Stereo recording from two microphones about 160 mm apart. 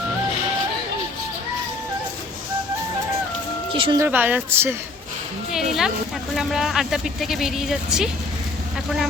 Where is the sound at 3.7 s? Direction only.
30° right (ahead or behind).